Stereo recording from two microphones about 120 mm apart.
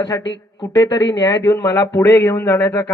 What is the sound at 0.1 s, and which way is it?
A man's voice, 25° left (ahead or behind).